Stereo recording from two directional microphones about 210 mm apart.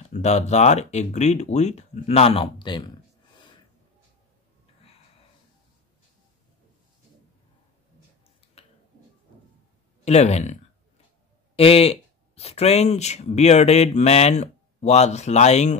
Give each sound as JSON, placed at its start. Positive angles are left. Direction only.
{"t": 0.1, "sound": "speech", "side_deg": 30}
{"t": 8.6, "sound": "a sound", "side_deg": 30}
{"t": 10.0, "sound": "speech", "side_deg": 30}